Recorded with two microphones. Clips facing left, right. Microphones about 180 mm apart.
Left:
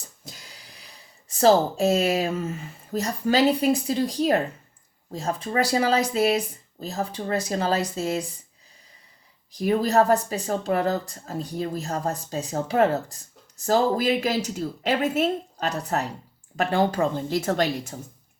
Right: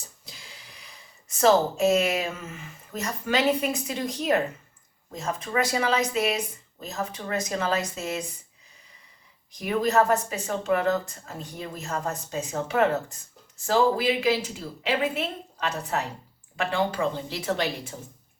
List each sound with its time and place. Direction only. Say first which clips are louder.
0.3 s a sound: left 4 dB; 40° left (ahead or behind)
1.3 s speech: left 2 dB; 35° left (ahead or behind)
9.5 s speech: left 3 dB; 35° left (ahead or behind)